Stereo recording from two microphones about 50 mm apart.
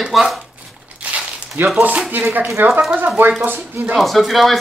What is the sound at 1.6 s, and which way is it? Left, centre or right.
Speech, right.